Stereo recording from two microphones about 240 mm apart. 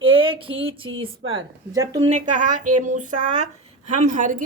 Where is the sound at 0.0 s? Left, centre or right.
Right.